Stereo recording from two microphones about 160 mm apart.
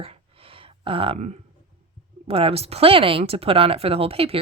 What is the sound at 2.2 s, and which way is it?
Speech, 40° right (ahead or behind).